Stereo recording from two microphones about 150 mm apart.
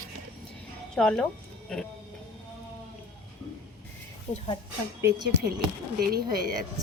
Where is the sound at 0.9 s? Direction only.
5° left (ahead or behind).